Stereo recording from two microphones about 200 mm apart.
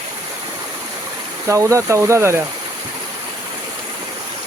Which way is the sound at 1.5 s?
15° right (ahead or behind).